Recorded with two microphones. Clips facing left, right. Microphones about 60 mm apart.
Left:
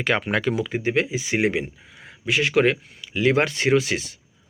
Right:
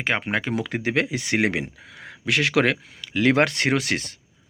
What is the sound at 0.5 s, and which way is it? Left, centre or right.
Speech, right.